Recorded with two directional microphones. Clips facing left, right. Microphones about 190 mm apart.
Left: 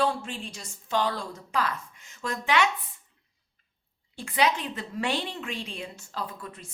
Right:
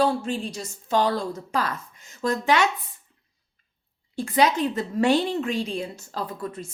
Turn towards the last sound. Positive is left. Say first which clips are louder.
# right 6 dB
turn(degrees=-45)  # may be behind; listen again after turning